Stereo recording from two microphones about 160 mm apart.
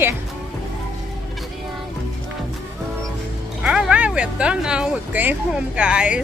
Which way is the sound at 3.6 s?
5° right (ahead or behind).